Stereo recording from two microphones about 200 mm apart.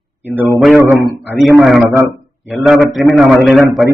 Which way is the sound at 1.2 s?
Centre (ahead or behind).